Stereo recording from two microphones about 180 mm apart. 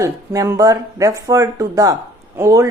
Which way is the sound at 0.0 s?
20° right (ahead or behind).